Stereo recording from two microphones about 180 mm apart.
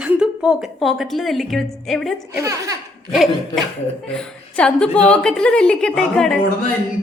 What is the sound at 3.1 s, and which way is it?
A woman's voice, centre (ahead or behind).